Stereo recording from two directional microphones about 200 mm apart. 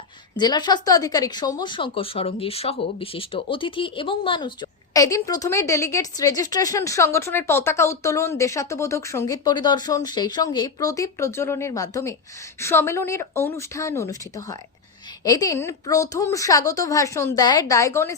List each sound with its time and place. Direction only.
0.3 s speech: 20° left (ahead or behind)